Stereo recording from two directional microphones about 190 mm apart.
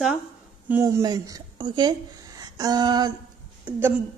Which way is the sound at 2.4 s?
20° right (ahead or behind).